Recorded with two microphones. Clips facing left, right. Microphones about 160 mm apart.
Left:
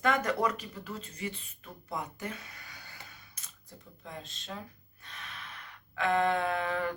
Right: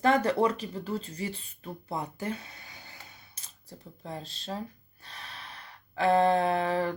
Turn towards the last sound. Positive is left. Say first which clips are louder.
# right 5 dB
turn(degrees=-35)  # may be behind; listen again after turning